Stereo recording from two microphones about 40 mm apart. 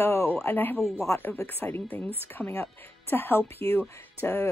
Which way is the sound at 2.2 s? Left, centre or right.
Left.